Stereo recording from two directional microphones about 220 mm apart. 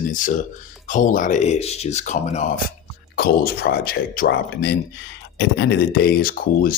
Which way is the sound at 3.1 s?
45° left (ahead or behind).